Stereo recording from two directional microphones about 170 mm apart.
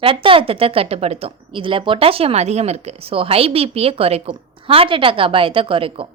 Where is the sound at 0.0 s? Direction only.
30° right (ahead or behind).